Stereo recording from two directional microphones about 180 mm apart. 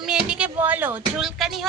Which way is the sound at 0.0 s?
5° right (ahead or behind).